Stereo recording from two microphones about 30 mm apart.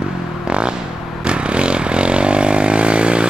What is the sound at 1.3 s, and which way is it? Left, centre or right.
Vehicle, right.